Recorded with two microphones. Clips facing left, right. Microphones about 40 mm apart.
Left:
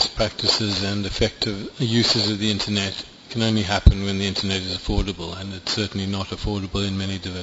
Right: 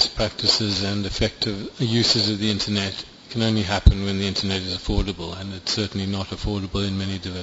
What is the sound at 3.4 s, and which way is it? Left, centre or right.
Speech, centre.